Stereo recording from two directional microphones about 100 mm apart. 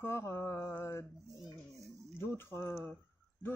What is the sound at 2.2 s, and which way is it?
Speech, 25° left (ahead or behind).